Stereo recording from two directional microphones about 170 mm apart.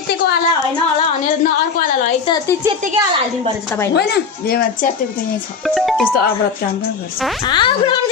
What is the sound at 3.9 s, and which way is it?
Speech, 70° left (ahead or behind).